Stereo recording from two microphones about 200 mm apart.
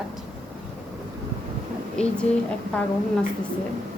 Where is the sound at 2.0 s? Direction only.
5° left (ahead or behind).